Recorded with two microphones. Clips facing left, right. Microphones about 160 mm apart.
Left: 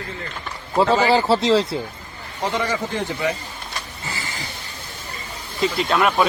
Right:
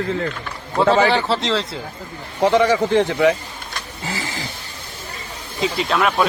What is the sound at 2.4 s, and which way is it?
Speech, 70° right (ahead or behind).